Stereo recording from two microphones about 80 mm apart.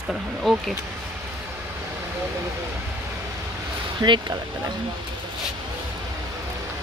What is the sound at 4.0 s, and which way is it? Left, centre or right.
Speech, right.